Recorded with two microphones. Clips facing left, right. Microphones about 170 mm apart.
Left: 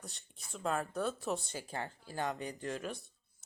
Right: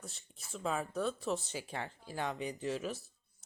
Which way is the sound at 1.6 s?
35° left (ahead or behind).